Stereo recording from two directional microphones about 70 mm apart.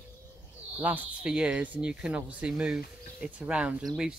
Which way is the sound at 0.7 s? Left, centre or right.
Centre.